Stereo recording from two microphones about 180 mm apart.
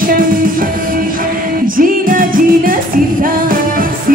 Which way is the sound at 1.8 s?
50° right (ahead or behind).